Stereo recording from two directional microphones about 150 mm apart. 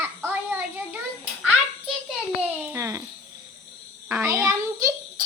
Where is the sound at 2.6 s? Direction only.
20° right (ahead or behind).